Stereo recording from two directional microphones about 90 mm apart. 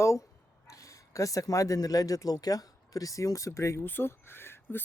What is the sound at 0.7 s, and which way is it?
Speech, 35° left (ahead or behind).